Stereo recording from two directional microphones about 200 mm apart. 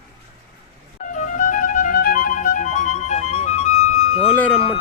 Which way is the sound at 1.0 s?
40° left (ahead or behind).